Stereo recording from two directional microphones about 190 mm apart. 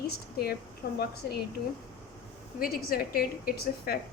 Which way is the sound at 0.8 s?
55° left (ahead or behind).